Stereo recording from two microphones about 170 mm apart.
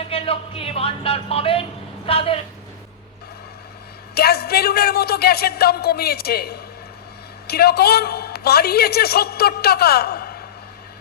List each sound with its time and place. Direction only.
0.0 s a woman's voice: 35° left (ahead or behind)
4.1 s a woman's voice: 65° left (ahead or behind)